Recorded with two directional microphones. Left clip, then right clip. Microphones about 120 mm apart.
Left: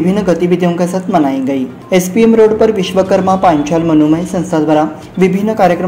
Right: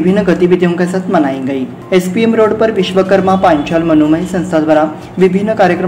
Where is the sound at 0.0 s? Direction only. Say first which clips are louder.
Right 2 dB; 40° left (ahead or behind).